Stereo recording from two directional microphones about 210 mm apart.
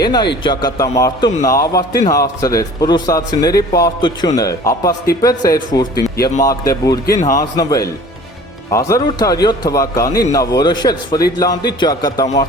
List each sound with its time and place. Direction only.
0.0 s a man's voice: 20° left (ahead or behind)